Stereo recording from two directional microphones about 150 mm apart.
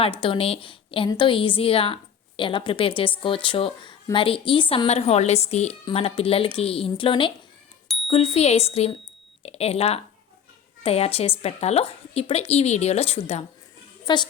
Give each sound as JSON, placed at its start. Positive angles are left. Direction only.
{"t": 0.0, "sound": "a woman's voice", "side_deg": 35}
{"t": 14.0, "sound": "a child's voice", "side_deg": 30}